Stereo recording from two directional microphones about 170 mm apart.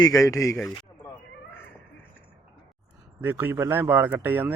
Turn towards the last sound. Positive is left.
turn(degrees=-10)  # may be behind; listen again after turning